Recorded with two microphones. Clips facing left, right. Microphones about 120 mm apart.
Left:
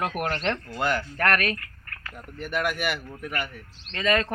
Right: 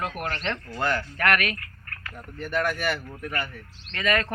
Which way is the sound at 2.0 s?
15° left (ahead or behind).